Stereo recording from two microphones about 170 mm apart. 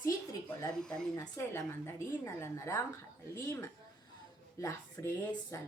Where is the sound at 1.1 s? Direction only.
15° left (ahead or behind).